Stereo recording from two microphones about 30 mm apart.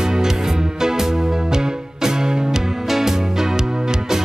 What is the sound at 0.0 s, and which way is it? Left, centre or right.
Music, centre.